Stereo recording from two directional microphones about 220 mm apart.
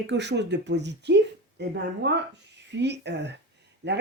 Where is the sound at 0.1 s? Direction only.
50° right (ahead or behind).